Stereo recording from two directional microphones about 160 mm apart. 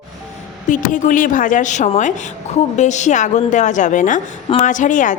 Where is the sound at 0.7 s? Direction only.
55° left (ahead or behind).